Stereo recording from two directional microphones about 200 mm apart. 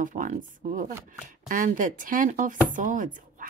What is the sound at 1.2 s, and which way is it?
Speech, 40° right (ahead or behind).